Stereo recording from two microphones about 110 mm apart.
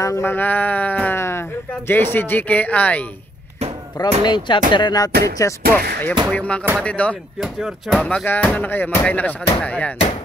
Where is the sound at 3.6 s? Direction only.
75° right (ahead or behind).